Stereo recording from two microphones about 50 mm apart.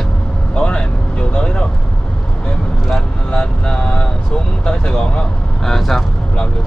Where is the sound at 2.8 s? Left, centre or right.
Centre.